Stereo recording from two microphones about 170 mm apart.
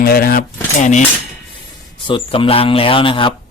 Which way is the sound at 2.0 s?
30° left (ahead or behind).